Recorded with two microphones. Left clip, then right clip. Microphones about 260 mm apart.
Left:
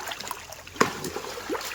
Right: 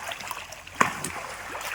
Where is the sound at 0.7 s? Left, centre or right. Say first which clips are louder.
Right 1 dB; centre.